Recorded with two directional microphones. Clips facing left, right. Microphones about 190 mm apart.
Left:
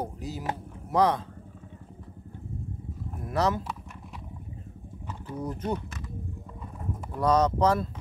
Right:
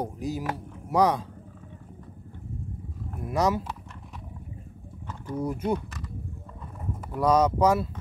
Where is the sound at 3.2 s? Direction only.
10° right (ahead or behind).